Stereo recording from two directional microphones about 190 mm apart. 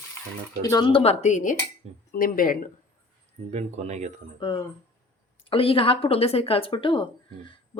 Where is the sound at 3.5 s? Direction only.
35° right (ahead or behind).